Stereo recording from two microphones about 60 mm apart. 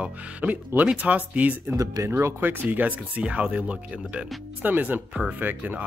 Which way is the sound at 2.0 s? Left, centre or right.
Right.